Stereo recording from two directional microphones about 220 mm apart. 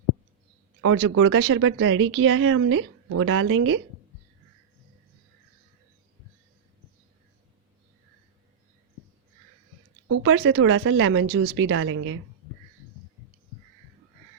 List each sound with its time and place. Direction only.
0.8 s speech: 85° right
10.1 s speech: 85° right; by 12.2 s 65° right (ahead or behind)